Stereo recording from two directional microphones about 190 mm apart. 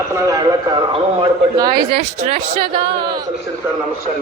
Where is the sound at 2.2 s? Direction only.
35° right (ahead or behind).